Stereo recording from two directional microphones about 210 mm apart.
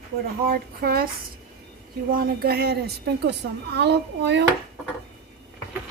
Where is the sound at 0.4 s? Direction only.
45° right (ahead or behind).